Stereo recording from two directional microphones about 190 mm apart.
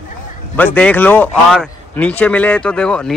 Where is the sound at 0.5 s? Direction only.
10° left (ahead or behind).